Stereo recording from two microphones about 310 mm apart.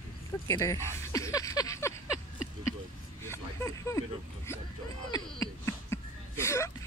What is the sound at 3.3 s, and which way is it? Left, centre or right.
Vehicle, centre.